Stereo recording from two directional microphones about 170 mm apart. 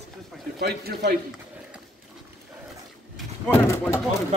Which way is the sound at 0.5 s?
65° right (ahead or behind).